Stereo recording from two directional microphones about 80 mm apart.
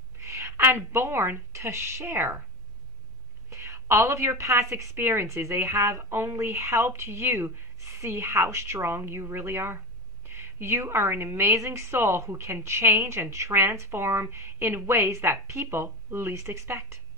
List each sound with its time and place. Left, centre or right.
0.2 s a sound: right
0.6 s a woman's voice: right
3.4 s a woman's voice: right